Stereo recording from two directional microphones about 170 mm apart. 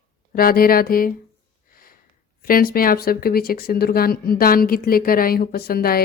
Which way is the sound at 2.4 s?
60° left (ahead or behind).